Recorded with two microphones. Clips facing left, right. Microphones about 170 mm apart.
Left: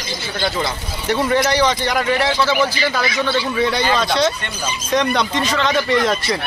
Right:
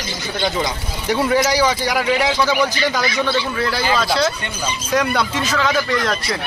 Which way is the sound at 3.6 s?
5° right (ahead or behind).